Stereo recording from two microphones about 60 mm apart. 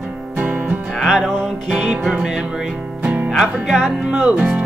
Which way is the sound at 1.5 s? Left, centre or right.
Centre.